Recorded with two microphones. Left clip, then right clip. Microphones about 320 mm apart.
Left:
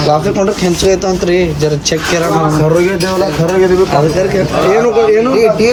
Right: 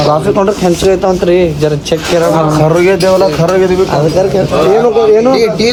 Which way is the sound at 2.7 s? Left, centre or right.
Centre.